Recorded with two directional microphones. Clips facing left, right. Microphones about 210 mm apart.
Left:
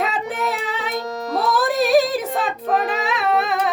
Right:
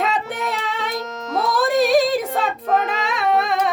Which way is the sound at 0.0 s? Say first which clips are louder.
Even; centre (ahead or behind).